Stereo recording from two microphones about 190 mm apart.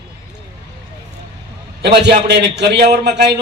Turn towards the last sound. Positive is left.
turn(degrees=-60)  # may be behind; listen again after turning